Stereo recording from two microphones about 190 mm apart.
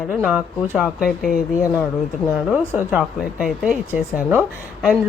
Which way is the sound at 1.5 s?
15° left (ahead or behind).